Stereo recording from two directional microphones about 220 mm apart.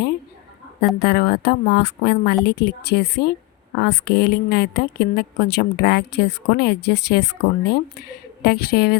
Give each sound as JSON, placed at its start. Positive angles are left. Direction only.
{"t": 0.9, "sound": "a woman's voice", "side_deg": 45}